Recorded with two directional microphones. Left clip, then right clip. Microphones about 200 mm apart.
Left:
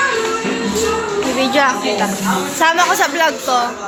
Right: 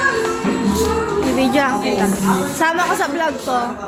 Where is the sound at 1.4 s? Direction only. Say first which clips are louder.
Left 4 dB; 10° right (ahead or behind).